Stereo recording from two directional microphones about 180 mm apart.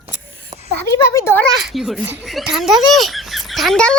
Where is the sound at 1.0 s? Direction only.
15° left (ahead or behind).